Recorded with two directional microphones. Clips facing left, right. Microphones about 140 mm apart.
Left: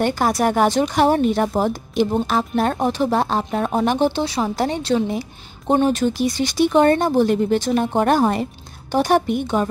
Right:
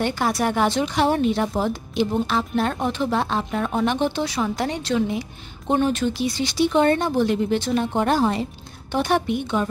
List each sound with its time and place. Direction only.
0.0 s a woman's voice: 45° left (ahead or behind)
8.9 s a woman's voice: 40° left (ahead or behind)